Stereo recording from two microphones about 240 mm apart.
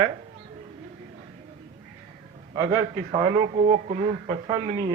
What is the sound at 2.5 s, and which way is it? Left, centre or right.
A man's voice, centre.